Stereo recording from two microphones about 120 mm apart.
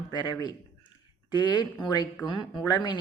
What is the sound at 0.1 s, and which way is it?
A woman's voice, 35° left (ahead or behind).